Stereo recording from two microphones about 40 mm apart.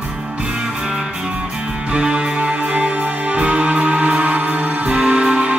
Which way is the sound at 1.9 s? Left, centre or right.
Right.